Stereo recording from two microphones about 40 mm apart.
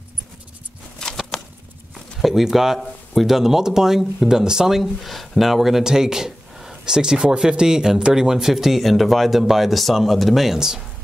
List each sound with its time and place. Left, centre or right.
1.0 s a sound: centre
2.2 s speech: centre
5.0 s speech: centre